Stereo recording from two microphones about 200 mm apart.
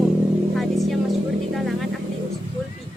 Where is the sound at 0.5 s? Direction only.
Centre (ahead or behind).